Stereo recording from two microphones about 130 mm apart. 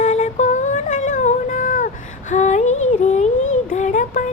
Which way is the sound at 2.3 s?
65° left (ahead or behind).